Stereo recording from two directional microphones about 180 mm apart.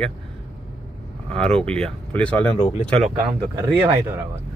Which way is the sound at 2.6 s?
35° left (ahead or behind).